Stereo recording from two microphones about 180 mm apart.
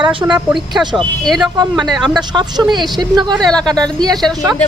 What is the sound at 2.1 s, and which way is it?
Speech, 25° right (ahead or behind).